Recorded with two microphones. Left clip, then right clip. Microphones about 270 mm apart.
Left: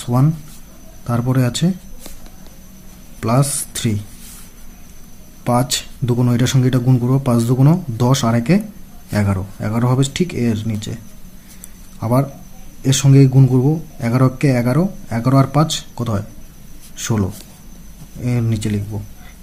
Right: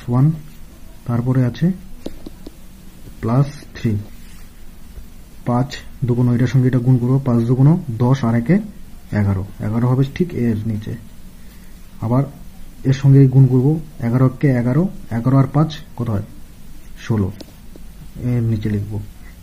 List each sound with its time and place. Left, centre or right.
0.0 s speech: centre
3.2 s speech: centre
5.4 s speech: centre
12.0 s speech: centre